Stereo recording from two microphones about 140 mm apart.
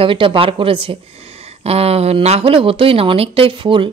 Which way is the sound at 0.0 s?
40° right (ahead or behind).